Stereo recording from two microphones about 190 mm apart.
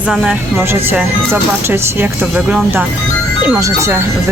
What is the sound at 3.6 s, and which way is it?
Speech, 15° right (ahead or behind).